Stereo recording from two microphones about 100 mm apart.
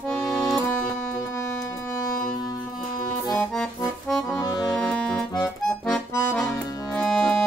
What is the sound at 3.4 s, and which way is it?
Accordion, 5° left (ahead or behind).